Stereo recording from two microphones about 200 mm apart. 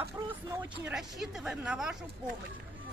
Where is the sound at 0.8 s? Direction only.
Centre (ahead or behind).